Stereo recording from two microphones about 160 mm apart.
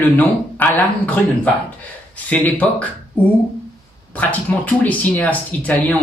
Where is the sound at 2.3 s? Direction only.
10° left (ahead or behind).